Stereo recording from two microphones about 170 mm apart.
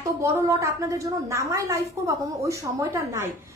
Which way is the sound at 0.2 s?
20° right (ahead or behind).